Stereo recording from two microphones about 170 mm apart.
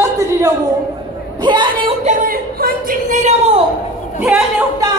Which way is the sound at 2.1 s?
55° right (ahead or behind).